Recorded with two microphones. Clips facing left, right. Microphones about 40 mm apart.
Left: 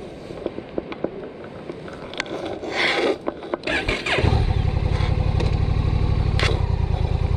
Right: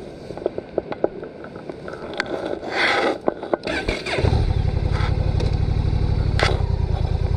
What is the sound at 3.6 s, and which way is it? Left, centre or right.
Motorcycle, left.